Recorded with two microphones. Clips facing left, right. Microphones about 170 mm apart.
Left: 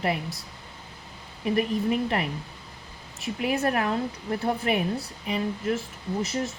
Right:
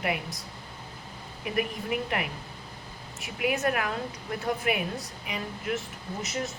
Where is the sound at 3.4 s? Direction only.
30° left (ahead or behind).